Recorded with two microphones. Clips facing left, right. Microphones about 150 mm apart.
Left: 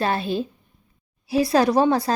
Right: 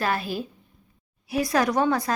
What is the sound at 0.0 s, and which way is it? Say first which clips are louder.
A woman's voice: left 4 dB; 25° left (ahead or behind).